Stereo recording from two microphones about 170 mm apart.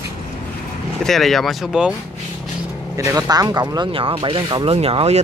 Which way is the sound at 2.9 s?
20° right (ahead or behind).